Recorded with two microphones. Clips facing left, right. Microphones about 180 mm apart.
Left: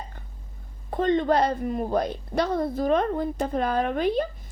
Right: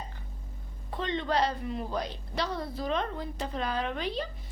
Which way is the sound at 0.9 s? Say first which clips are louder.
Left 10 dB; 50° left (ahead or behind).